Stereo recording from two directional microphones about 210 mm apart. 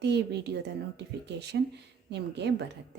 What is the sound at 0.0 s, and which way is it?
A woman's voice, 55° right (ahead or behind).